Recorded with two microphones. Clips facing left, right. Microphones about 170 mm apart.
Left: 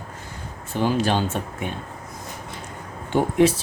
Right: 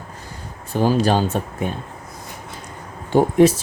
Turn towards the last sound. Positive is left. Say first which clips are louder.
# right 4 dB
turn(degrees=-40)  # may be behind; listen again after turning